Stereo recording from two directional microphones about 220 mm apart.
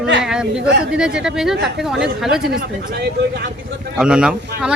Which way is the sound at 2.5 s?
45° right (ahead or behind).